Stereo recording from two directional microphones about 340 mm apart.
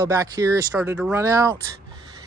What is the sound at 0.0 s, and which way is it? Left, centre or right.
Speech, centre.